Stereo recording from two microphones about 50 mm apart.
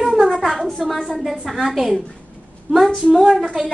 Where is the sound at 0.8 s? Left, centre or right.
Centre.